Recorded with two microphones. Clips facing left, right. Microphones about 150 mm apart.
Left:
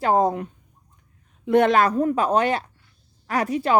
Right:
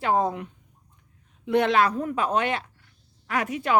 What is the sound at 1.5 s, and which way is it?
Speech, 45° left (ahead or behind).